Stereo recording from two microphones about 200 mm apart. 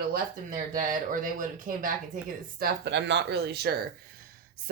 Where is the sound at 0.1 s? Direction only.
45° right (ahead or behind).